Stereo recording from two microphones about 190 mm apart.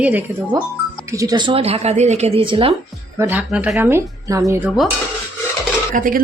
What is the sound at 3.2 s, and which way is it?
Speech, 10° right (ahead or behind).